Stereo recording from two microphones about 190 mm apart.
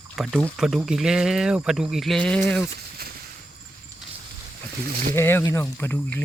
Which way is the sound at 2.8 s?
55° right (ahead or behind).